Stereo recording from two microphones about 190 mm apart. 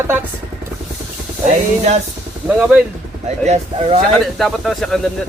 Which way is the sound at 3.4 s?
35° right (ahead or behind).